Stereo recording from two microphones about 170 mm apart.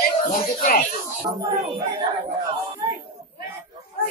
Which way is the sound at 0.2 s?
55° left (ahead or behind).